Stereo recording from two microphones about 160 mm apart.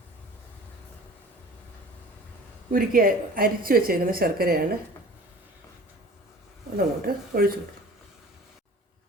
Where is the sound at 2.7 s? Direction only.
60° right (ahead or behind).